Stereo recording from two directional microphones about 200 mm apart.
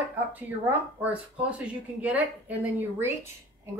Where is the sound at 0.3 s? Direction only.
10° right (ahead or behind).